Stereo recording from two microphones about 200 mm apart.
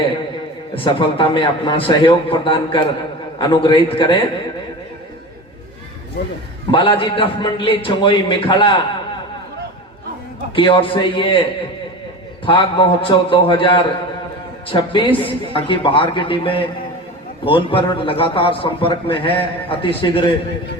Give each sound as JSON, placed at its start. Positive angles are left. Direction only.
{"t": 0.8, "sound": "a man's voice", "side_deg": 25}
{"t": 6.7, "sound": "a man's voice", "side_deg": 25}
{"t": 10.5, "sound": "a man's voice", "side_deg": 25}
{"t": 12.5, "sound": "a man's voice", "side_deg": 25}